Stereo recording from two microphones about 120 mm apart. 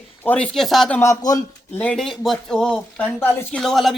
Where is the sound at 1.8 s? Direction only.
5° left (ahead or behind).